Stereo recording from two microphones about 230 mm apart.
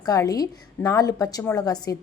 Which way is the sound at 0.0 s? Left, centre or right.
Centre.